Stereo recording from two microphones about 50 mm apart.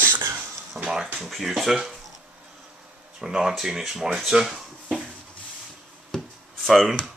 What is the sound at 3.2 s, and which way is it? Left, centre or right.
Speech, centre.